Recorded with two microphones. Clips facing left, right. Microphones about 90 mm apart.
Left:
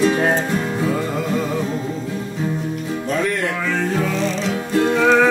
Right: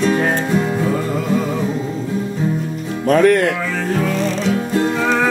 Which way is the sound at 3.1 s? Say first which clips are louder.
Right 10 dB; 60° right (ahead or behind).